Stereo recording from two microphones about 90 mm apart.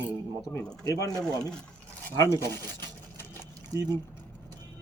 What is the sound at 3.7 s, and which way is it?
Speech, 40° right (ahead or behind).